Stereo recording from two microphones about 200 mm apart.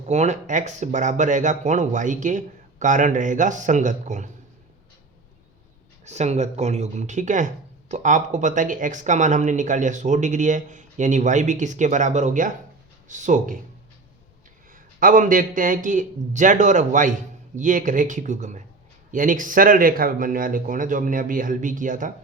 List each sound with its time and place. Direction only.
0.0 s speech: 35° right (ahead or behind)
6.1 s speech: 35° right (ahead or behind)
14.7 s speech: 40° right (ahead or behind)